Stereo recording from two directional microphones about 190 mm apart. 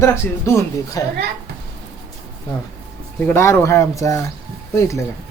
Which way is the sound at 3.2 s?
10° left (ahead or behind).